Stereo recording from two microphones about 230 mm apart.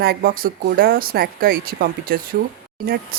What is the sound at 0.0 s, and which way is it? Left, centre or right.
Speech, right.